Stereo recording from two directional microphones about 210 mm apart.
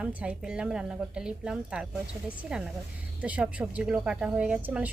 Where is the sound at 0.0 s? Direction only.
5° right (ahead or behind).